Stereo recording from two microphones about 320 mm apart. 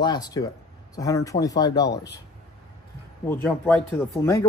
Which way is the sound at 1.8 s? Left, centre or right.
Left.